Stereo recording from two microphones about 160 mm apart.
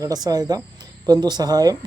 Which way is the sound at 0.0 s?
25° right (ahead or behind).